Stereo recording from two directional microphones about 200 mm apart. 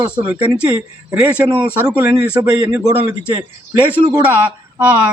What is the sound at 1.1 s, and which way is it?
Speech, 5° right (ahead or behind).